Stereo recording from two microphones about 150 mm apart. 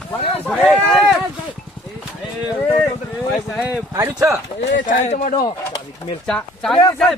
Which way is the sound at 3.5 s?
10° right (ahead or behind).